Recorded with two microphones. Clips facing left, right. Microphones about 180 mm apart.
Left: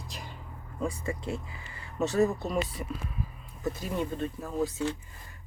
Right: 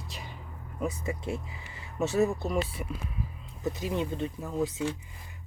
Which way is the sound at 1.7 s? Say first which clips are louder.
Even; 15° right (ahead or behind).